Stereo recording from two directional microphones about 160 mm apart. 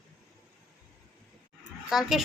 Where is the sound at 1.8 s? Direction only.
Centre (ahead or behind).